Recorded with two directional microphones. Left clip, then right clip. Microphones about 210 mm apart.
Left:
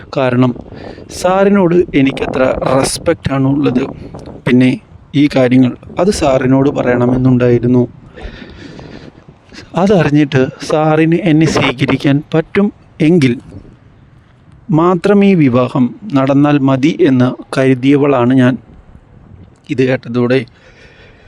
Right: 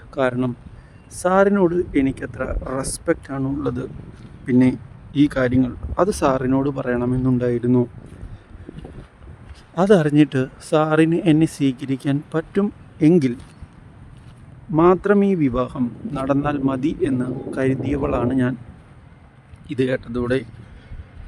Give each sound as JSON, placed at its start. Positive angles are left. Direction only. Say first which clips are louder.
{"t": 0.1, "sound": "speech", "louder": "left 8 dB", "side_deg": 40}
{"t": 9.6, "sound": "speech", "louder": "left 5 dB", "side_deg": 40}
{"t": 14.7, "sound": "speech", "louder": "left 5 dB", "side_deg": 45}
{"t": 19.6, "sound": "speech", "louder": "left 8 dB", "side_deg": 35}